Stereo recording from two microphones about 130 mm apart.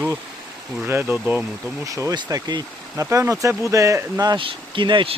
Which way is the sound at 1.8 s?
25° right (ahead or behind).